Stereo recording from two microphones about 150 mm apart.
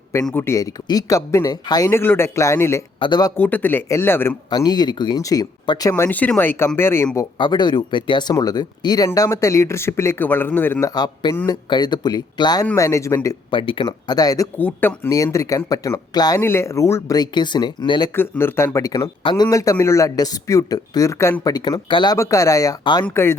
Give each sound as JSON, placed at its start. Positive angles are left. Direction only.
{"t": 0.3, "sound": "speech", "side_deg": 15}
{"t": 3.0, "sound": "speech", "side_deg": 30}
{"t": 3.3, "sound": "speech", "side_deg": 10}
{"t": 4.4, "sound": "speech", "side_deg": 30}
{"t": 5.9, "sound": "speech", "side_deg": 10}
{"t": 7.3, "sound": "speech", "side_deg": 30}
{"t": 13.5, "sound": "speech", "side_deg": 35}
{"t": 14.6, "sound": "speech", "side_deg": 15}
{"t": 18.1, "sound": "speech", "side_deg": 15}
{"t": 23.0, "sound": "speech", "side_deg": 15}